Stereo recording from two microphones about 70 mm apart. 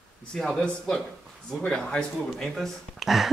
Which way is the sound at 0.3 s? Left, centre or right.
Centre.